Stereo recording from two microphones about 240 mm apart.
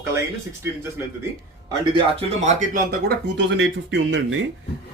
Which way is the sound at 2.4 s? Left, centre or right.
Right.